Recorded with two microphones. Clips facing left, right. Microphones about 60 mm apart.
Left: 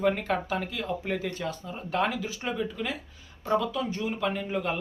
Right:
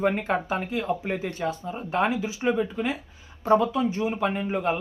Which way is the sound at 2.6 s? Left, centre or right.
Right.